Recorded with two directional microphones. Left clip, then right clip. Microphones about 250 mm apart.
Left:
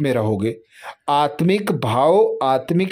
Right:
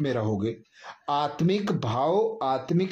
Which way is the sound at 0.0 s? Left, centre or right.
Left.